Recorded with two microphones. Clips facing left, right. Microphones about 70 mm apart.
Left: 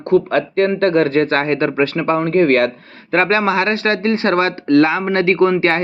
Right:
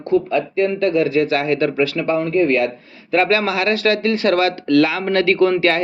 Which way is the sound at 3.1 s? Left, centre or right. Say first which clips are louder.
Left 2 dB; left.